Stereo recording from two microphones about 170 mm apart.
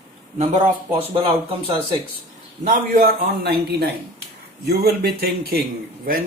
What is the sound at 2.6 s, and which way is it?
A man's voice, 55° right (ahead or behind).